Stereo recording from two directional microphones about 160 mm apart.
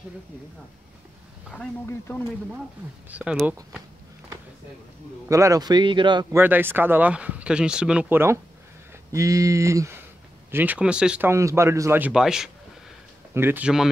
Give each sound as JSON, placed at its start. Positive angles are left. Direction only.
{"t": 1.9, "sound": "speech", "side_deg": 15}
{"t": 3.1, "sound": "speech", "side_deg": -5}
{"t": 5.3, "sound": "a man's voice", "side_deg": -20}
{"t": 6.3, "sound": "a man's voice", "side_deg": -10}
{"t": 12.1, "sound": "speech", "side_deg": -5}
{"t": 13.3, "sound": "speech", "side_deg": -15}